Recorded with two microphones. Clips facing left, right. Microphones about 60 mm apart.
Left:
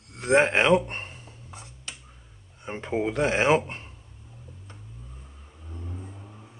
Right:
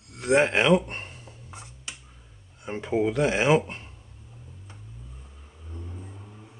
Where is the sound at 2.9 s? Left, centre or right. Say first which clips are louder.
Right 1 dB; left.